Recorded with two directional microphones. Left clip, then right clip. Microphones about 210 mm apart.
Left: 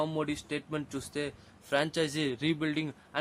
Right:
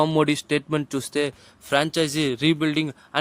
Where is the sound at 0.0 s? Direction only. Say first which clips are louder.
Right 12 dB; 45° right (ahead or behind).